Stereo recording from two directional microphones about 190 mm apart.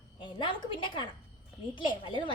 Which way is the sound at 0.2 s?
25° left (ahead or behind).